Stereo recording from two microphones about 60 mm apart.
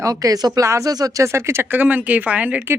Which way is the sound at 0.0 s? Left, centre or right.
Right.